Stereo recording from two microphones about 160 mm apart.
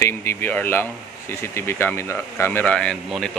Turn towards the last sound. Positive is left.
turn(degrees=5)  # may be behind; listen again after turning